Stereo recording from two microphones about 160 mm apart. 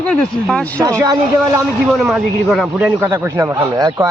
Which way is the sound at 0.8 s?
20° right (ahead or behind).